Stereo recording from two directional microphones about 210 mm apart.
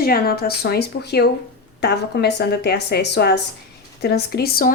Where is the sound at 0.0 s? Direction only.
45° left (ahead or behind).